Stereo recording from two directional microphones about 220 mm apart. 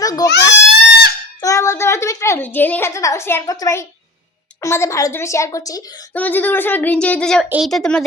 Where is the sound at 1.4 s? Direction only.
15° left (ahead or behind).